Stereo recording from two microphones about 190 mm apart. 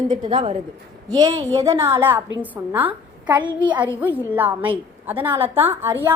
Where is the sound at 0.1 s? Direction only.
25° right (ahead or behind); by 3.4 s 10° right (ahead or behind).